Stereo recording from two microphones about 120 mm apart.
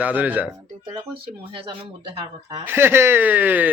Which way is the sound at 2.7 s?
20° right (ahead or behind).